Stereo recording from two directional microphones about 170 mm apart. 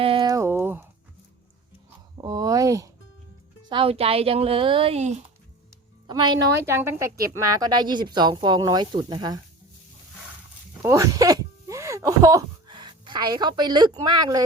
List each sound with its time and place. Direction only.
0.0 s a sound: 30° right (ahead or behind); by 0.9 s 10° right (ahead or behind)
2.2 s a woman's voice: 20° right (ahead or behind)
3.7 s speech: 30° right (ahead or behind)
6.1 s a woman's voice: 25° right (ahead or behind)
6.6 s a woman's voice: 15° right (ahead or behind)
10.8 s speech: 20° right (ahead or behind)